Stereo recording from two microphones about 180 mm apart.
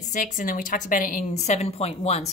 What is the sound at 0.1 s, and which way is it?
A woman's voice, 45° left (ahead or behind).